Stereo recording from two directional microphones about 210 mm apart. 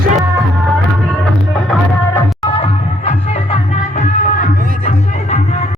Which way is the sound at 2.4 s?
25° left (ahead or behind).